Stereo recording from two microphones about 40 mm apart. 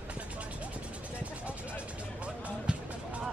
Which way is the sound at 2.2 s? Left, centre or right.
Right.